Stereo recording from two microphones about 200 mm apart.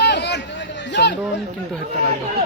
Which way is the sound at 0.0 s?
60° left (ahead or behind).